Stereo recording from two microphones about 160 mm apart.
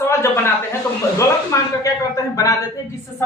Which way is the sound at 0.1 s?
15° left (ahead or behind).